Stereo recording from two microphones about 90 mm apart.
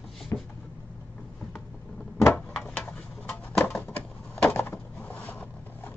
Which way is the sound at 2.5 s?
10° left (ahead or behind).